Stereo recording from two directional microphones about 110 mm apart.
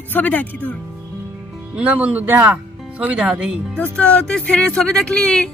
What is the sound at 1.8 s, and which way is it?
A man's voice, 10° right (ahead or behind).